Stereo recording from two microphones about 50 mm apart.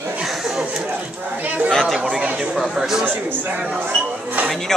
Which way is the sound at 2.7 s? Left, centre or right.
Centre.